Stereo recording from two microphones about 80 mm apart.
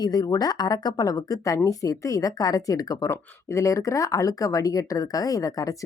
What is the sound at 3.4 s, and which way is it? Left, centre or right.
Speech, left.